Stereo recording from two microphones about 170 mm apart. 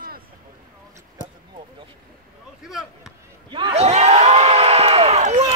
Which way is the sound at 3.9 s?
40° right (ahead or behind).